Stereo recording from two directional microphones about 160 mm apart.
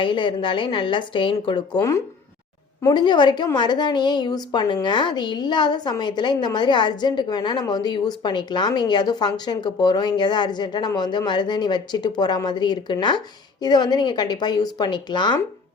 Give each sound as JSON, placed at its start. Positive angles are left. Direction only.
{"t": 0.0, "sound": "a woman's voice", "side_deg": 30}